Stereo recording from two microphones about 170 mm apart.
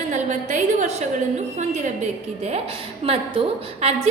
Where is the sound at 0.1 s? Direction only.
45° right (ahead or behind).